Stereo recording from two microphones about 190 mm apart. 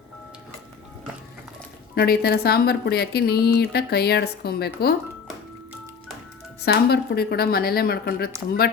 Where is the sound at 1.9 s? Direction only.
55° left (ahead or behind).